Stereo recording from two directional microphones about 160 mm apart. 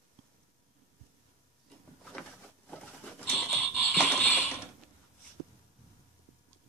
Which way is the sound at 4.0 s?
10° left (ahead or behind).